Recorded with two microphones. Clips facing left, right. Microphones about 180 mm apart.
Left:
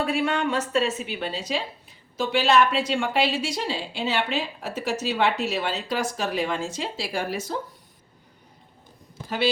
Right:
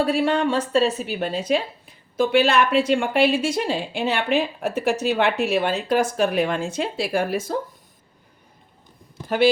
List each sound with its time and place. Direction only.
0.0 s a woman's voice: 35° right (ahead or behind); by 7.4 s 55° right (ahead or behind)